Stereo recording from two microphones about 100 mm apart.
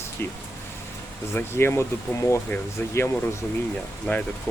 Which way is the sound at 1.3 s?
25° left (ahead or behind).